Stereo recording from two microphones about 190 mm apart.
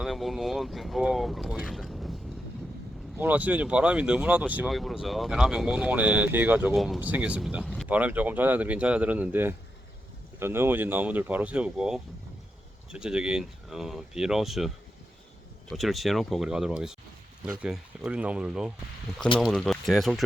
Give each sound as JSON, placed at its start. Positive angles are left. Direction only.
{"t": 0.0, "sound": "speech", "side_deg": 0}
{"t": 3.2, "sound": "speech", "side_deg": -10}
{"t": 15.7, "sound": "speech", "side_deg": 0}